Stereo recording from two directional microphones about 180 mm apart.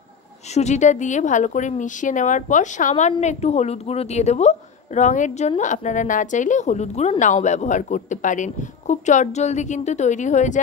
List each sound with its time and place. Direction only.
0.6 s a woman's voice: 40° left (ahead or behind)